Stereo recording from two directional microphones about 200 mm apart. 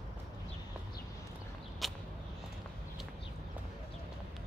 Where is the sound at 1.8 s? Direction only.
Centre (ahead or behind).